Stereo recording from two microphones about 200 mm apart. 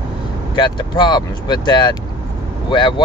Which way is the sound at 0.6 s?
20° left (ahead or behind).